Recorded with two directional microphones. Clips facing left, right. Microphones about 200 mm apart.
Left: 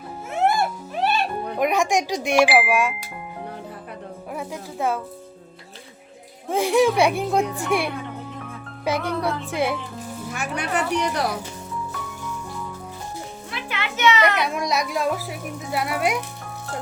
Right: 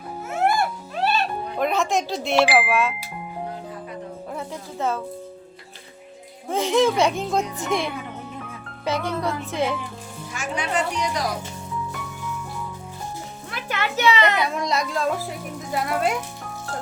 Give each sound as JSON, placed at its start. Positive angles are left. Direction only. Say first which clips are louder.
{"t": 0.3, "sound": "music", "louder": "left 1 dB", "side_deg": 20}
{"t": 1.5, "sound": "a woman's voice", "louder": "left 2 dB", "side_deg": 15}
{"t": 4.3, "sound": "speech", "louder": "left 4 dB", "side_deg": 10}
{"t": 6.5, "sound": "a woman's voice", "louder": "left 1 dB", "side_deg": 10}
{"t": 10.3, "sound": "a woman's voice", "louder": "right 1 dB", "side_deg": 60}
{"t": 13.5, "sound": "a child's voice", "louder": "right 4 dB", "side_deg": -45}
{"t": 14.3, "sound": "a woman's voice", "louder": "even", "side_deg": 15}